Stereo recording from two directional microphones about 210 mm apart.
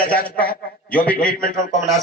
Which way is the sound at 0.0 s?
45° left (ahead or behind).